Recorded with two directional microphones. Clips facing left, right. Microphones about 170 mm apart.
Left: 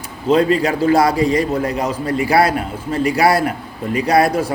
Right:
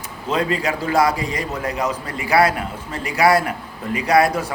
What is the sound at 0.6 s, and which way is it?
A man's voice, 35° left (ahead or behind).